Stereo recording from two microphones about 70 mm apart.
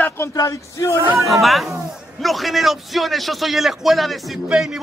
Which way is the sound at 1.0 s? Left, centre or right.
Right.